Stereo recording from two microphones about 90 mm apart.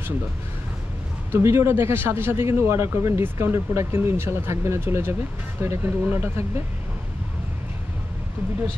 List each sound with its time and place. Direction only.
1.3 s a man's voice: 30° right (ahead or behind)